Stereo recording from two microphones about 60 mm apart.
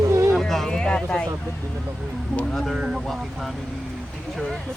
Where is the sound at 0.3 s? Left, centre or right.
Centre.